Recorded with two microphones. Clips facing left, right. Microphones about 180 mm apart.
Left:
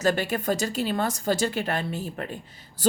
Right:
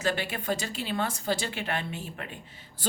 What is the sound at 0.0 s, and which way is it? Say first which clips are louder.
A woman's voice: left 6 dB; 40° left (ahead or behind).